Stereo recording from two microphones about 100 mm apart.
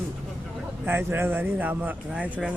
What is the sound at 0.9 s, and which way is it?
Speech, 20° right (ahead or behind).